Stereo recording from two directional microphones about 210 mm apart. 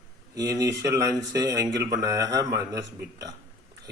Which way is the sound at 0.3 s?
15° right (ahead or behind).